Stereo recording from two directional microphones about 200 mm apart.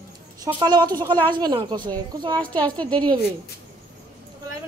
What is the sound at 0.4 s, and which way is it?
Speech, 20° right (ahead or behind).